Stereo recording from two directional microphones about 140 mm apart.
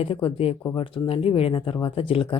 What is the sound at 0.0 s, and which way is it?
Speech, 40° left (ahead or behind).